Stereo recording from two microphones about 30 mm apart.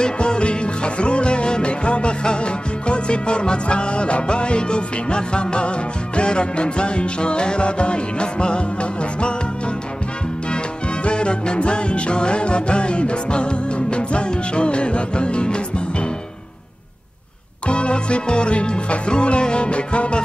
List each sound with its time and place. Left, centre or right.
0.0 s music: left
11.1 s music: left
17.6 s music: left